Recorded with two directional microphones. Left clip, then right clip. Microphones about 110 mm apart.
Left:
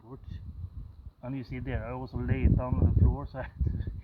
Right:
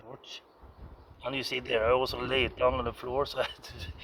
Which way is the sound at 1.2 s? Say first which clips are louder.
Right 8 dB; 20° right (ahead or behind).